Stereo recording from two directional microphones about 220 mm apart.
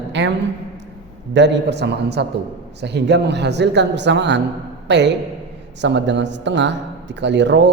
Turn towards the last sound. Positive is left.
turn(degrees=-55)  # may be behind; listen again after turning